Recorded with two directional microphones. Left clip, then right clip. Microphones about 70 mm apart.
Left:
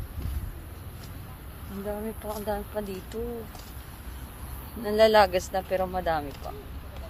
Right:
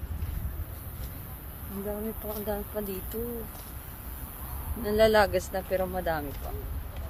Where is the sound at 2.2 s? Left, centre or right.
Right.